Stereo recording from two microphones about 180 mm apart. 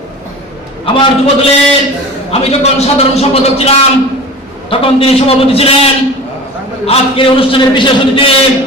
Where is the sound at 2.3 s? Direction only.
35° left (ahead or behind).